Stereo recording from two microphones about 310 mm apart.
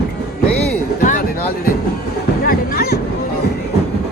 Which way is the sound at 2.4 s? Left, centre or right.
Left.